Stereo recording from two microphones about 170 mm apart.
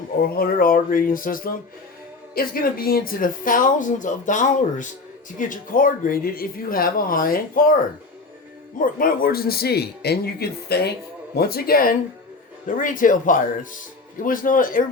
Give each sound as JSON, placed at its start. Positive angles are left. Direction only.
{"t": 0.3, "sound": "speech", "side_deg": 60}
{"t": 8.8, "sound": "a man's voice", "side_deg": 55}